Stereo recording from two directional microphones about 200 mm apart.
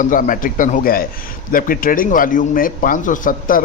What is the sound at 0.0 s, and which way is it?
Speech, 40° left (ahead or behind).